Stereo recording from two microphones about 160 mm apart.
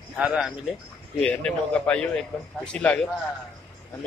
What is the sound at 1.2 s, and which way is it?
Speech, 5° left (ahead or behind).